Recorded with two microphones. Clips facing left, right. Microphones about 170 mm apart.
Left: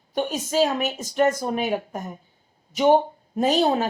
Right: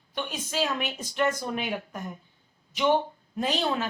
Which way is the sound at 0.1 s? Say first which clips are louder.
Left 8 dB; 45° left (ahead or behind).